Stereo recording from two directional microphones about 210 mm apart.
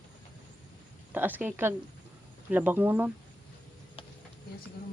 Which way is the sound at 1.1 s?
10° right (ahead or behind).